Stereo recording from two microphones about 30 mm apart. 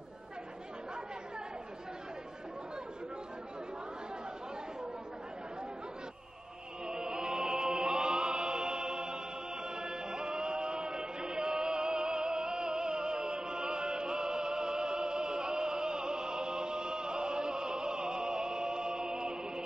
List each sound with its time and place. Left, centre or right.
6.9 s music: right